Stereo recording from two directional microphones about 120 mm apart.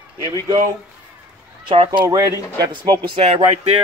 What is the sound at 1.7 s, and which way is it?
Speech, 50° right (ahead or behind).